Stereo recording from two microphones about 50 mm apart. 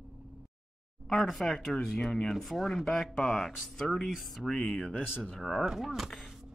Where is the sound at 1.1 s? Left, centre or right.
Centre.